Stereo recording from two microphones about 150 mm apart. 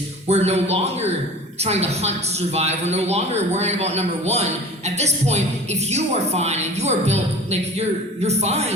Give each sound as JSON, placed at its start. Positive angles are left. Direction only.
{"t": 0.3, "sound": "a woman's voice", "side_deg": -45}